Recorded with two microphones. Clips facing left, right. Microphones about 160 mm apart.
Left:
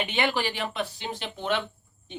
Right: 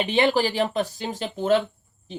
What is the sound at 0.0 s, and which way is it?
Speech, 35° right (ahead or behind).